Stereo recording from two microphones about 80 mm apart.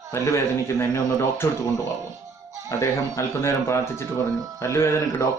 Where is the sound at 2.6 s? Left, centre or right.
Left.